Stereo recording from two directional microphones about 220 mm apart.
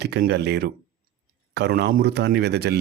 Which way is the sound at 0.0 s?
45° right (ahead or behind).